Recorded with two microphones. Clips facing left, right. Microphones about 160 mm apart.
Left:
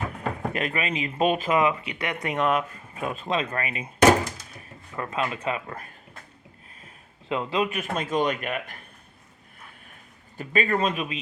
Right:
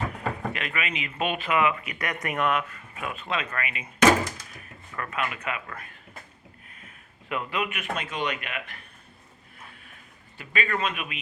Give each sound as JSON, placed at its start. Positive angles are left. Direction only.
{"t": 0.5, "sound": "speech", "side_deg": 35}
{"t": 4.9, "sound": "speech", "side_deg": 25}
{"t": 10.3, "sound": "speech", "side_deg": 40}